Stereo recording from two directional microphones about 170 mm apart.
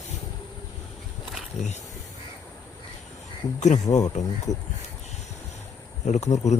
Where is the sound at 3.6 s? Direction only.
45° left (ahead or behind).